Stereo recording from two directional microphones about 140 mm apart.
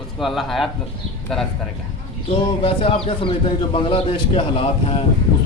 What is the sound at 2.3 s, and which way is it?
A man's voice, 40° left (ahead or behind).